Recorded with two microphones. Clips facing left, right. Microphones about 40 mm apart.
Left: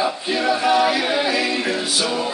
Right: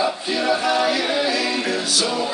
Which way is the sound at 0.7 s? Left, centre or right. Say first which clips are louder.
Left 2 dB; left.